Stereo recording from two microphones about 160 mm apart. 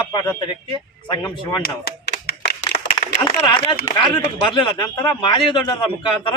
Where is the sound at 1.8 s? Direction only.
85° left.